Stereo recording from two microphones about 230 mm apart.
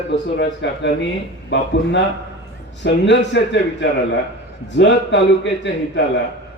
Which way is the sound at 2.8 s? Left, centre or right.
Left.